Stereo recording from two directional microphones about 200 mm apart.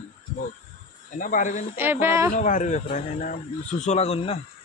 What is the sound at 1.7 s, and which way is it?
Speech, 10° right (ahead or behind).